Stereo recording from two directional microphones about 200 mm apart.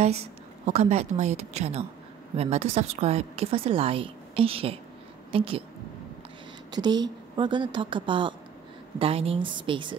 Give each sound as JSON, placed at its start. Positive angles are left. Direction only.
{"t": 0.7, "sound": "a woman's voice", "side_deg": -35}
{"t": 6.7, "sound": "a woman's voice", "side_deg": -20}